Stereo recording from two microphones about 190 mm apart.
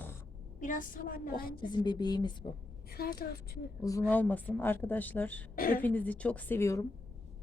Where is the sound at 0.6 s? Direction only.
45° left (ahead or behind).